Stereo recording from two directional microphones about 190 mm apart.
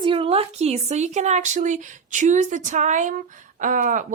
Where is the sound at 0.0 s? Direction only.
25° right (ahead or behind).